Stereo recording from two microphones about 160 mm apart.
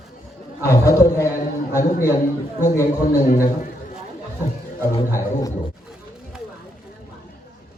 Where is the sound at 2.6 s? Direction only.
15° left (ahead or behind).